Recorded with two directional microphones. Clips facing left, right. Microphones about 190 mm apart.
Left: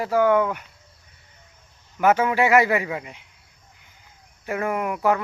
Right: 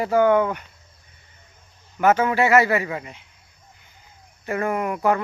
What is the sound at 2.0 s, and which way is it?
Speech, 10° left (ahead or behind).